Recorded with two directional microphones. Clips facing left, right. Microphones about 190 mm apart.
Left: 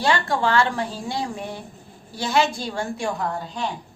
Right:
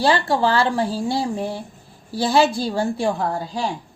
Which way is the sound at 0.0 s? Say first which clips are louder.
Right 3 dB; 30° right (ahead or behind).